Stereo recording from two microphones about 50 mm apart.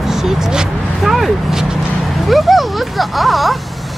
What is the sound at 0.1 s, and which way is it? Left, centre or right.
Speech, centre.